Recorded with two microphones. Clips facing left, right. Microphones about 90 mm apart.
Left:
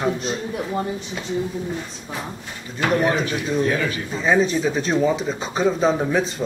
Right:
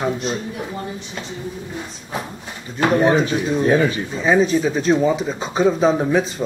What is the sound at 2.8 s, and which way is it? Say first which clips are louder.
Speech: right 4 dB; 25° right (ahead or behind).